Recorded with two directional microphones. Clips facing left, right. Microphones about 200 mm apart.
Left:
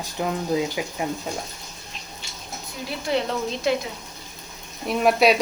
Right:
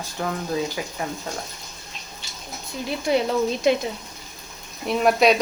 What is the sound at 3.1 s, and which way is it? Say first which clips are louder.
Speech: right 3 dB; 15° right (ahead or behind).